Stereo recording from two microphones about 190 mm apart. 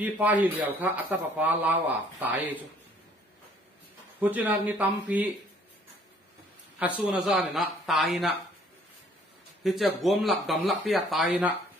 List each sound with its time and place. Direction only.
0.0 s speech: 10° right (ahead or behind)
4.2 s speech: 10° right (ahead or behind)
6.8 s speech: 5° right (ahead or behind)
9.6 s speech: centre (ahead or behind)